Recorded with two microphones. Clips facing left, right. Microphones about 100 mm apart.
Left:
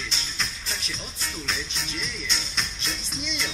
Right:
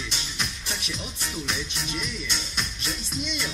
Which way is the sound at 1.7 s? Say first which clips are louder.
Right 2 dB; 60° right (ahead or behind).